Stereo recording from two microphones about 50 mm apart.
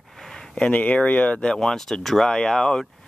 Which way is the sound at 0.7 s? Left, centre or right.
Left.